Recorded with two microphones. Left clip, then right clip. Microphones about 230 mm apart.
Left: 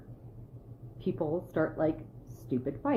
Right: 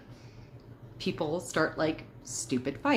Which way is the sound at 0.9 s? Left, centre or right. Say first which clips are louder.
Right 1 dB; centre.